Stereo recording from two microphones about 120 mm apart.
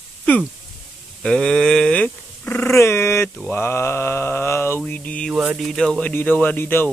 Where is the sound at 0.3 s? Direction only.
10° left (ahead or behind).